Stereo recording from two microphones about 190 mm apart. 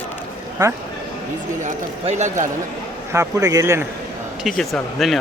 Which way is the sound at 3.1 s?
15° right (ahead or behind).